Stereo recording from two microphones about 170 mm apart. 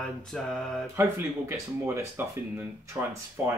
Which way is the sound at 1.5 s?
10° right (ahead or behind).